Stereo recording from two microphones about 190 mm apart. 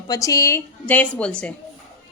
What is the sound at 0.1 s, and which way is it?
A woman's voice, 20° left (ahead or behind).